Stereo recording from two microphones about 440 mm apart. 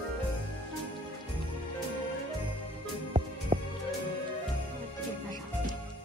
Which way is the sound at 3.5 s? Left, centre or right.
Centre.